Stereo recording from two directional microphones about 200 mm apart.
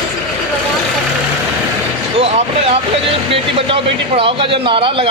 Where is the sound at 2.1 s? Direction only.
30° right (ahead or behind).